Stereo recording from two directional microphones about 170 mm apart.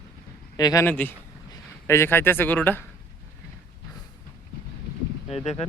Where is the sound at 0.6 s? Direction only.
25° left (ahead or behind).